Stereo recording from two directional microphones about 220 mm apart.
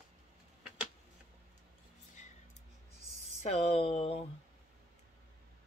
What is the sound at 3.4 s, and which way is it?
Speech, 30° left (ahead or behind).